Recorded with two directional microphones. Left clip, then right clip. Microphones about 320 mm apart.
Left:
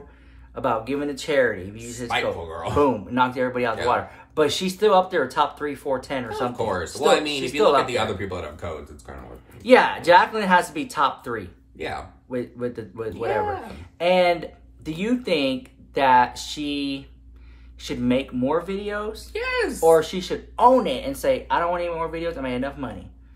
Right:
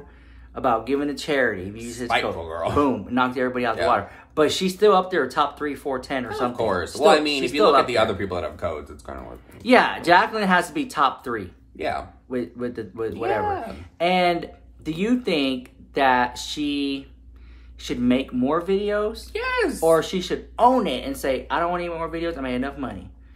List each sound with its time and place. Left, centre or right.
0.6 s speech: centre
2.5 s speech: centre
2.8 s speech: centre
6.6 s speech: centre
7.2 s speech: centre
7.8 s speech: centre
9.6 s speech: centre